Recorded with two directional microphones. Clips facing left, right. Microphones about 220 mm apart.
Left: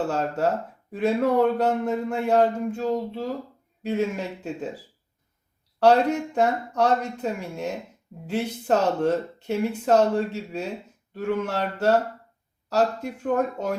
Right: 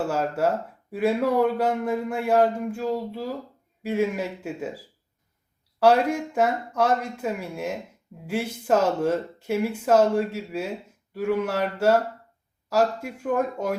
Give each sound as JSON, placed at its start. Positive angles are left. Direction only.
{"t": 0.1, "sound": "speech", "side_deg": -10}
{"t": 5.8, "sound": "speech", "side_deg": -10}